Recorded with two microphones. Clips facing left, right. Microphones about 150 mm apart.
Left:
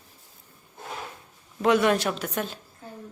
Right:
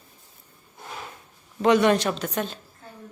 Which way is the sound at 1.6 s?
Centre (ahead or behind).